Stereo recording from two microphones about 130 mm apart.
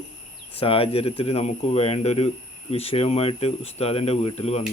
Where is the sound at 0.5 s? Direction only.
45° left (ahead or behind).